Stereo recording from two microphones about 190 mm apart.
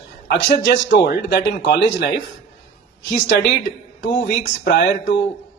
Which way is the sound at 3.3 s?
65° left (ahead or behind).